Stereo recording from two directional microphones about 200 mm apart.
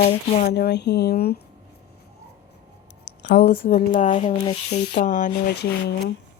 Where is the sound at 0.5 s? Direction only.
55° left (ahead or behind).